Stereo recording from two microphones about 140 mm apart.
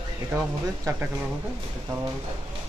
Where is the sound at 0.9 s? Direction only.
25° right (ahead or behind).